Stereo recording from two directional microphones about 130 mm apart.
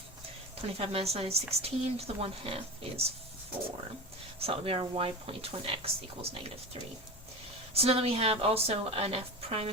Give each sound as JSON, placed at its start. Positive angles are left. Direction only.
{"t": 0.8, "sound": "a woman's voice", "side_deg": -50}
{"t": 4.4, "sound": "a woman's voice", "side_deg": -50}
{"t": 7.7, "sound": "a woman's voice", "side_deg": -50}